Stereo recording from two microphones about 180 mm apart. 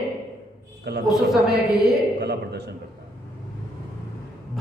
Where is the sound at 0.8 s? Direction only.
70° right (ahead or behind).